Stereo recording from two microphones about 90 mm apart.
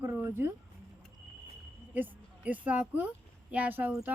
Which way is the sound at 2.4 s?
15° right (ahead or behind).